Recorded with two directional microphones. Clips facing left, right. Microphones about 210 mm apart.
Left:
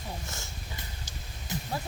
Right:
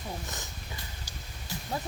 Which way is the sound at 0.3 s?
15° right (ahead or behind).